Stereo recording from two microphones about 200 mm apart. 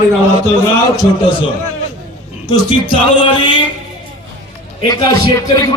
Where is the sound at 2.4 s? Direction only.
20° left (ahead or behind).